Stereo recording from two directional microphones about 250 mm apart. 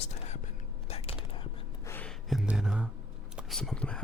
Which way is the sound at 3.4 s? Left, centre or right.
Centre.